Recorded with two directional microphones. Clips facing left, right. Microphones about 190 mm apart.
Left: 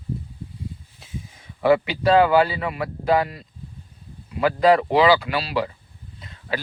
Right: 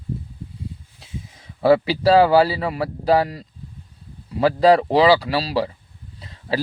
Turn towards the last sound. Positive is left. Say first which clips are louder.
# right 4 dB
turn(degrees=-30)  # may be behind; listen again after turning